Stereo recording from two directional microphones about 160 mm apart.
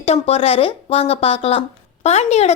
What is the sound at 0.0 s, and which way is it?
Speech, 40° left (ahead or behind).